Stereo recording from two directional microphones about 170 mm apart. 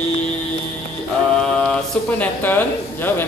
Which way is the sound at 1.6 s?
5° left (ahead or behind).